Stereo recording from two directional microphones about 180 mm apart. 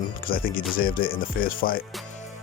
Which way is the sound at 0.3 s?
55° left (ahead or behind).